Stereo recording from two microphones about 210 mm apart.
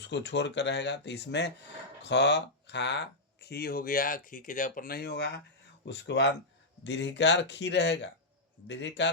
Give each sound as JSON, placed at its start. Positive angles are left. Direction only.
{"t": 0.0, "sound": "speech", "side_deg": 55}